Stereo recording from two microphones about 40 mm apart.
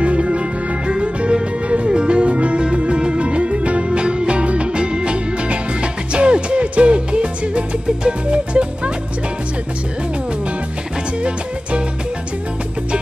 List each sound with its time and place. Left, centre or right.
0.0 s music: right